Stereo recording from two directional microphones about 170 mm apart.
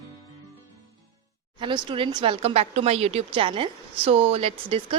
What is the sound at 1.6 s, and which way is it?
Speech, 30° right (ahead or behind).